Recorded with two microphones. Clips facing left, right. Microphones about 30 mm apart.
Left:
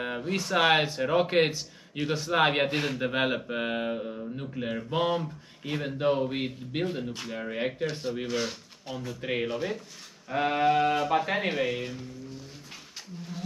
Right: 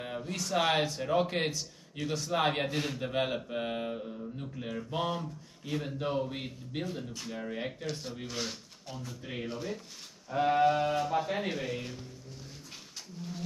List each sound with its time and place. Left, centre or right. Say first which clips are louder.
0.0 s a man's voice: left 6 dB; left
8.9 s speech: left 9 dB; left
10.3 s a man's voice: left 2 dB; left